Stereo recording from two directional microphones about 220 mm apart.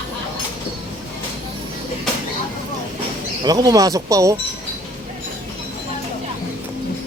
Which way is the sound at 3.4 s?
15° right (ahead or behind).